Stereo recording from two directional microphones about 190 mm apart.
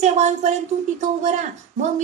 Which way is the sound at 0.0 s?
35° right (ahead or behind).